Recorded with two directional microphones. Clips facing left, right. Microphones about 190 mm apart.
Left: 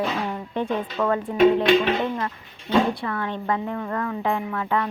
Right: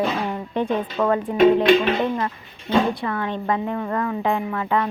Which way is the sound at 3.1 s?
20° right (ahead or behind).